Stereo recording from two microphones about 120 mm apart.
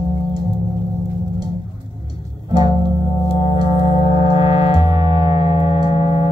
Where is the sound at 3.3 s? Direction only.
50° left (ahead or behind).